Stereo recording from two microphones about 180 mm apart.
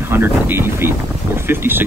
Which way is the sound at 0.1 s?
10° right (ahead or behind).